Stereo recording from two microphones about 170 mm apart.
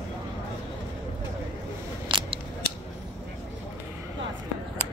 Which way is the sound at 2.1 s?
30° right (ahead or behind).